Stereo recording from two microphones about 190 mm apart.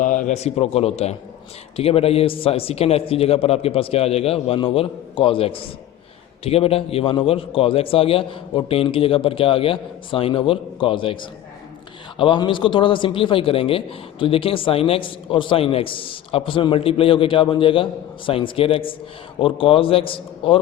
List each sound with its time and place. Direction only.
0.0 s a man's voice: 45° left (ahead or behind)